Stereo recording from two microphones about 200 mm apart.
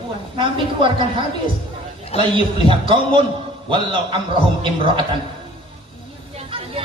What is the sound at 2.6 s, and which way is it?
A man's voice, 25° right (ahead or behind).